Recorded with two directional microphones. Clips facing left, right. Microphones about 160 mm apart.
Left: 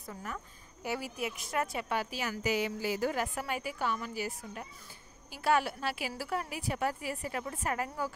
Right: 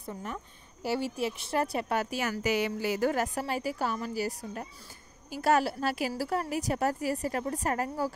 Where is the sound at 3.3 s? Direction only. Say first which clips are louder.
Right 4 dB; 35° right (ahead or behind).